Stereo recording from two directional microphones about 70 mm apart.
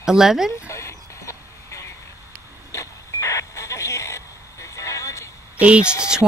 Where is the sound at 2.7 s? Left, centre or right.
Left.